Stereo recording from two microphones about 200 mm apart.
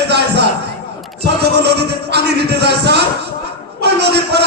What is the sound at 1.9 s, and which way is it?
Speech, 55° right (ahead or behind).